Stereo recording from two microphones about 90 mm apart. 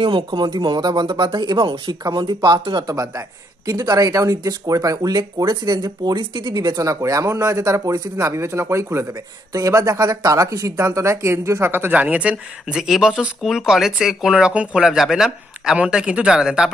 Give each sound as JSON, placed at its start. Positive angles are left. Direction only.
{"t": 0.0, "sound": "speech", "side_deg": -65}
{"t": 2.9, "sound": "speech", "side_deg": -40}
{"t": 6.9, "sound": "speech", "side_deg": -35}
{"t": 11.9, "sound": "speech", "side_deg": -15}